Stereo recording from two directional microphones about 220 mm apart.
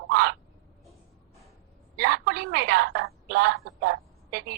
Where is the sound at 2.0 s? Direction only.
50° right (ahead or behind).